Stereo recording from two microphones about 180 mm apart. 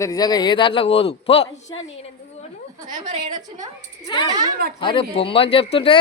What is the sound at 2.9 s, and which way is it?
Speech, 45° right (ahead or behind).